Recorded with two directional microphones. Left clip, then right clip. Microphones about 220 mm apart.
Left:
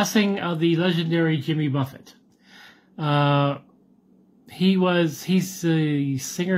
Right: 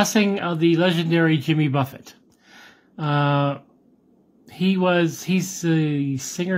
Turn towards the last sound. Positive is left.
turn(degrees=-10)  # may be behind; listen again after turning